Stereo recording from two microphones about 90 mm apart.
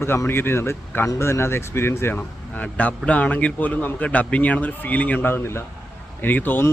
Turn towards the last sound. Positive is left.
turn(degrees=20)  # may be behind; listen again after turning